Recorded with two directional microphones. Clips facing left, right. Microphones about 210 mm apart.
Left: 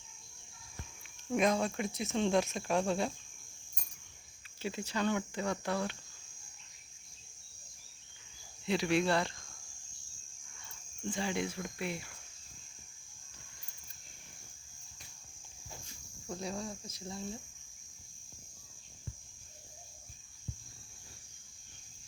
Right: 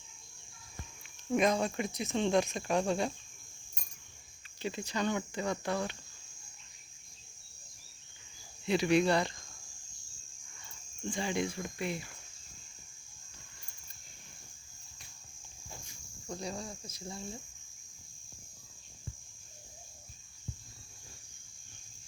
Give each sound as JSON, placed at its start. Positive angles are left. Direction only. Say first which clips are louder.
{"t": 1.3, "sound": "speech", "louder": "right 1 dB", "side_deg": 0}
{"t": 4.6, "sound": "speech", "louder": "even", "side_deg": 5}
{"t": 8.6, "sound": "speech", "louder": "right 3 dB", "side_deg": 0}
{"t": 11.1, "sound": "speech", "louder": "right 2 dB", "side_deg": 0}
{"t": 16.3, "sound": "speech", "louder": "left 1 dB", "side_deg": 0}